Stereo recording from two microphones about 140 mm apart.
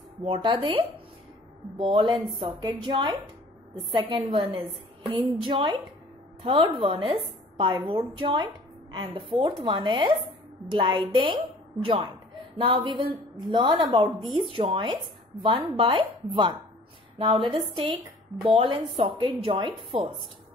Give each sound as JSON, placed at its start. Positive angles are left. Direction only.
{"t": 0.2, "sound": "a woman's voice", "side_deg": -40}